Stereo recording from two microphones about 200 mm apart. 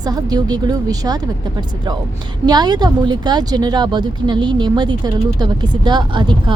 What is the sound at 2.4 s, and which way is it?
A woman's voice, 20° right (ahead or behind).